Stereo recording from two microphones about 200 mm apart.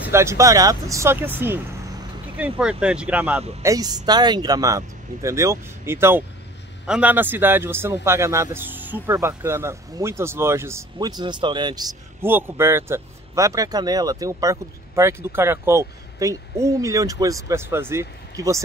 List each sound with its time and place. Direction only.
0.1 s a man's voice: 15° right (ahead or behind)
3.6 s a man's voice: 20° right (ahead or behind)